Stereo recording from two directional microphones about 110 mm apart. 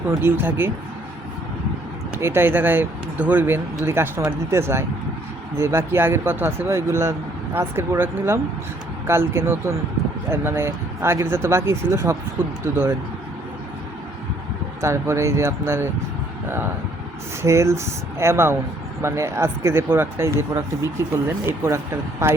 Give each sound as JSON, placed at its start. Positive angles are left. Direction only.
{"t": 0.2, "sound": "speech", "side_deg": -20}
{"t": 2.1, "sound": "speech", "side_deg": -20}
{"t": 14.8, "sound": "speech", "side_deg": -25}
{"t": 17.4, "sound": "speech", "side_deg": -25}